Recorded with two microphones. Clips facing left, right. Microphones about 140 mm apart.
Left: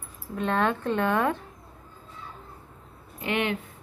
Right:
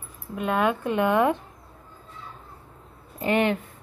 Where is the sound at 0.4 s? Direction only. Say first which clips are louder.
Right 2 dB; 10° right (ahead or behind).